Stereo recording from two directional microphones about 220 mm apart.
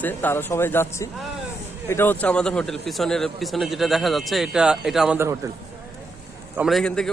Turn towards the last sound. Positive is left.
turn(degrees=5)  # may be behind; listen again after turning